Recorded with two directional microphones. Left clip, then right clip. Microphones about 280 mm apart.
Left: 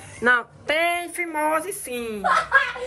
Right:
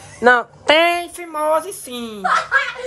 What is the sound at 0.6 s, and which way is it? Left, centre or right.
Speech, right.